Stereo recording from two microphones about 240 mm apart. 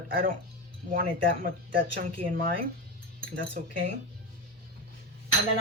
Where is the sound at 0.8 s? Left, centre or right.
Right.